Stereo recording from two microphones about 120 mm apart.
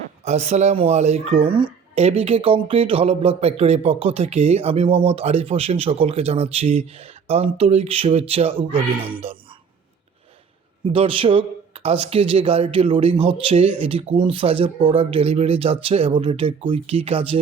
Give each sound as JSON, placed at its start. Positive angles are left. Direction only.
{"t": 0.3, "sound": "speech", "side_deg": -70}
{"t": 2.0, "sound": "speech", "side_deg": -60}
{"t": 9.2, "sound": "a sound", "side_deg": -50}
{"t": 10.8, "sound": "speech", "side_deg": -50}